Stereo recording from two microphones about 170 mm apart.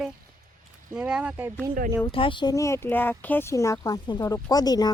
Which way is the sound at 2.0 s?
30° left (ahead or behind).